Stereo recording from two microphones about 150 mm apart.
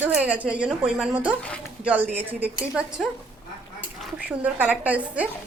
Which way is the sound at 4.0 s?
Centre (ahead or behind).